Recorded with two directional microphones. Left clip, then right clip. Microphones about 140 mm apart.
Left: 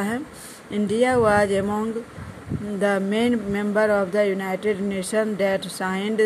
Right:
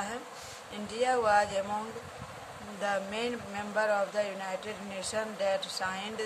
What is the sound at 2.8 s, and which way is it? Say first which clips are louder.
Speech: left 10 dB; 60° left (ahead or behind).